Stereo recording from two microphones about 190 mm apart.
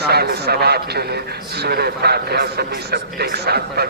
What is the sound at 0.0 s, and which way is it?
A man's voice, 55° right (ahead or behind).